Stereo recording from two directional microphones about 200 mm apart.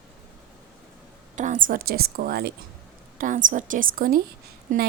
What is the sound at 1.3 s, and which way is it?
Speech, 40° right (ahead or behind).